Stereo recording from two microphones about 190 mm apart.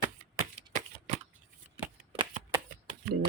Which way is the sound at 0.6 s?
35° right (ahead or behind).